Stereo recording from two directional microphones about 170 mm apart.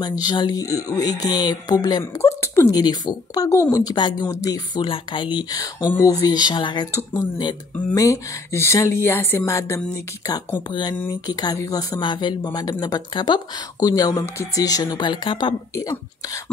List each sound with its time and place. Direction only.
0.0 s speech: 25° left (ahead or behind)